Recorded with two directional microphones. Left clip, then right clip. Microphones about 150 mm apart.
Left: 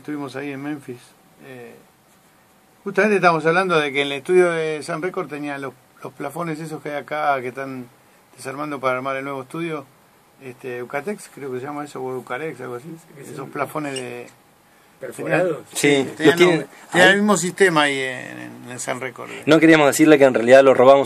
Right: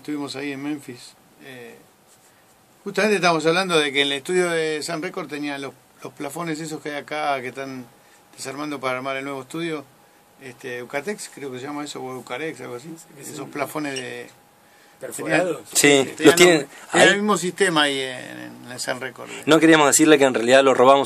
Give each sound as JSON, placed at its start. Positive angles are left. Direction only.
{"t": 0.0, "sound": "a man's voice", "side_deg": -10}
{"t": 2.8, "sound": "a man's voice", "side_deg": -10}
{"t": 15.7, "sound": "a man's voice", "side_deg": -35}
{"t": 17.1, "sound": "speech", "side_deg": 60}
{"t": 17.7, "sound": "speech", "side_deg": 0}
{"t": 19.2, "sound": "speech", "side_deg": 5}